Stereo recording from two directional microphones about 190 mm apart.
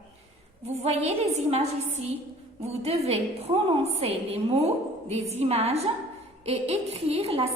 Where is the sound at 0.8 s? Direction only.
35° right (ahead or behind).